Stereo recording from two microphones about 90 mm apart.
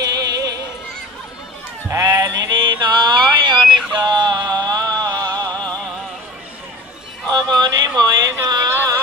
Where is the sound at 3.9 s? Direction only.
50° right (ahead or behind).